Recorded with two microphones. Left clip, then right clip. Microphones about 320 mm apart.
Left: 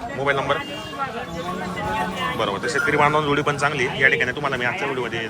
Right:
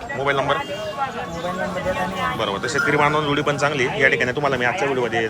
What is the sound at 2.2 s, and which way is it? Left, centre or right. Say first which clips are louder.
Speech: right 1 dB; centre.